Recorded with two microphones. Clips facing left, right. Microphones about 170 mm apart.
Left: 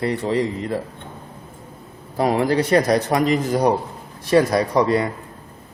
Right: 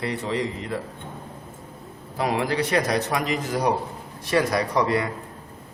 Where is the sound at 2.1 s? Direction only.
40° left (ahead or behind).